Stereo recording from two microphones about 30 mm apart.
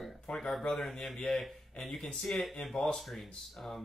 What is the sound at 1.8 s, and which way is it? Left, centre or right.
Speech, centre.